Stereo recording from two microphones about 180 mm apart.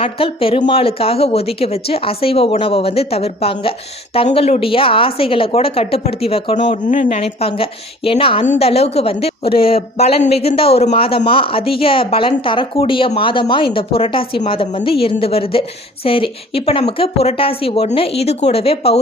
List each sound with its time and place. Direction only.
0.0 s speech: 30° left (ahead or behind)